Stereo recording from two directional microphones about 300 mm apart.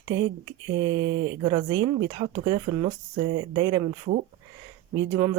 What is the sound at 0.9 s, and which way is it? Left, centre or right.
Speech, right.